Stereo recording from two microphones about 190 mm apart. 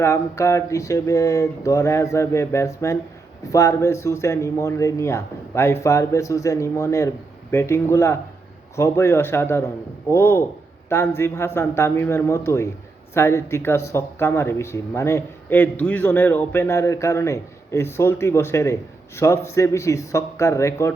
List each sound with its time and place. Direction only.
0.0 s speech: 15° left (ahead or behind)